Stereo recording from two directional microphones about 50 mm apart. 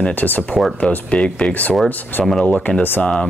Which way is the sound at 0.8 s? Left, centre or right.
Left.